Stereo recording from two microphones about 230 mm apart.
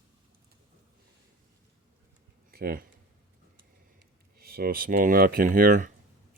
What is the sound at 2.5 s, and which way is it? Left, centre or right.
Speech, right.